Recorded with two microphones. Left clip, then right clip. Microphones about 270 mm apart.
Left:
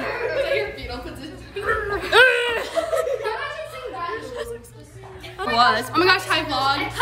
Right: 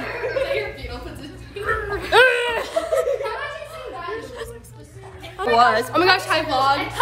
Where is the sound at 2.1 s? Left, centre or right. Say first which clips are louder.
Even; centre.